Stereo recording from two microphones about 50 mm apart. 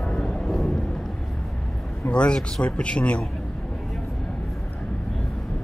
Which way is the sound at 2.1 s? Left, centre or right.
Centre.